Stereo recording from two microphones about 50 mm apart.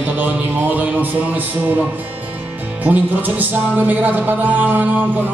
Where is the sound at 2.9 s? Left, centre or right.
Right.